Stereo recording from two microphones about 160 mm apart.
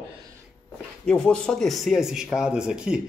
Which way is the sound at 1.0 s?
5° left (ahead or behind).